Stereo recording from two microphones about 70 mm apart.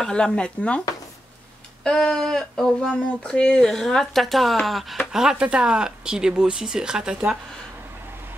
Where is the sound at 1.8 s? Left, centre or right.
Centre.